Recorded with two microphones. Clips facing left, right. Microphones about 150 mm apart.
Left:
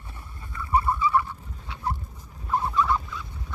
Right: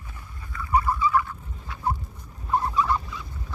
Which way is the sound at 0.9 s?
25° left (ahead or behind).